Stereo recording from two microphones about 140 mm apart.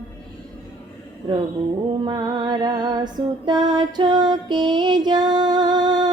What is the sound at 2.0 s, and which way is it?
Music, 35° right (ahead or behind).